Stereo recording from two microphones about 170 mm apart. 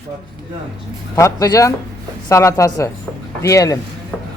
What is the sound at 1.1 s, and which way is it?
A woman's voice, 20° left (ahead or behind).